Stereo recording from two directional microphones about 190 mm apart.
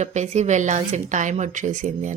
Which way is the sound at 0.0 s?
40° right (ahead or behind).